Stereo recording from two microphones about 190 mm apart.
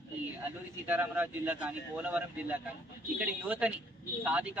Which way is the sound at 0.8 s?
10° right (ahead or behind).